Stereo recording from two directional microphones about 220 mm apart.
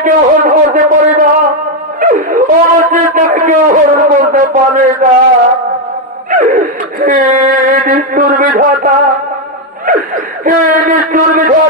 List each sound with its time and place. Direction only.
0.0 s a man's voice: 35° right (ahead or behind)
6.3 s a man's voice: 35° right (ahead or behind)